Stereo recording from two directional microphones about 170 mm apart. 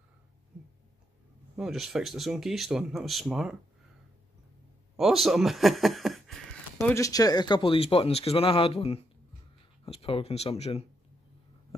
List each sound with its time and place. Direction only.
1.6 s speech: centre (ahead or behind)
4.9 s speech: centre (ahead or behind)
6.9 s speech: 20° left (ahead or behind); by 10.9 s 40° left (ahead or behind)